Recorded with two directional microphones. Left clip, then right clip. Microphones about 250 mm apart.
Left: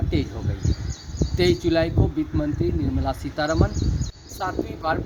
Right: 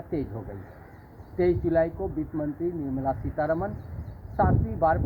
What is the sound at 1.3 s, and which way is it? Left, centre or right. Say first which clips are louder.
Speech: left 3 dB; left.